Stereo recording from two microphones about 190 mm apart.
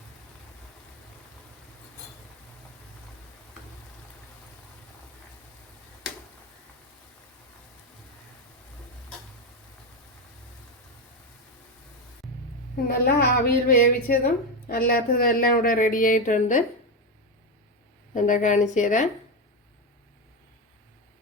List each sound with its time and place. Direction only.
12.7 s speech: 55° left (ahead or behind)
18.1 s a woman's voice: 40° left (ahead or behind)